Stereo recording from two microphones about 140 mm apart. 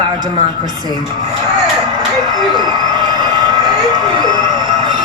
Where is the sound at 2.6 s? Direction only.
30° right (ahead or behind).